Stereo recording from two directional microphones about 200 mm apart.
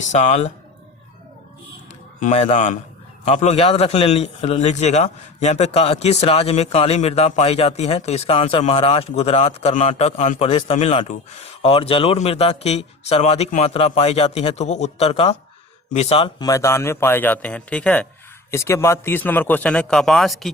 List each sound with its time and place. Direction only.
0.0 s a man's voice: 35° left (ahead or behind)
2.2 s a man's voice: 40° left (ahead or behind); by 20.5 s centre (ahead or behind)